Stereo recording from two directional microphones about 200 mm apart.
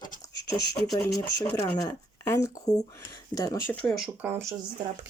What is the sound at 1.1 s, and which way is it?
Speech, 15° left (ahead or behind).